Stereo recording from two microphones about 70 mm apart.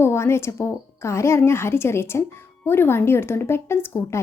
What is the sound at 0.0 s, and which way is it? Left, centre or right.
A woman's voice, left.